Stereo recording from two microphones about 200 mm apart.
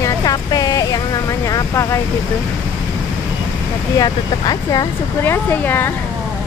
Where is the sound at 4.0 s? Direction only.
20° left (ahead or behind).